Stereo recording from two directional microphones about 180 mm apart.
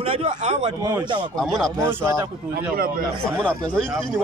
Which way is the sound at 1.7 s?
15° right (ahead or behind).